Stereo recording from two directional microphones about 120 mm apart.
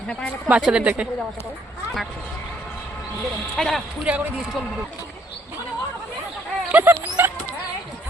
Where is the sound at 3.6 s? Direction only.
Centre (ahead or behind).